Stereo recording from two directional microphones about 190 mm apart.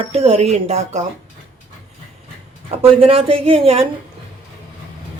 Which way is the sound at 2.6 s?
30° right (ahead or behind).